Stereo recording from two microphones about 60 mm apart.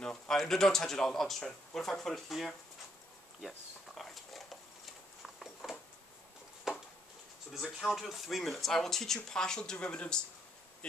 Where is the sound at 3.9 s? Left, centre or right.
Centre.